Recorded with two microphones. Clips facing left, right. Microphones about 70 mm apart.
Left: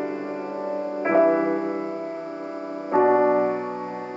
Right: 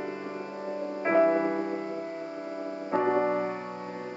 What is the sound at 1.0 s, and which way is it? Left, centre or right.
Music, left.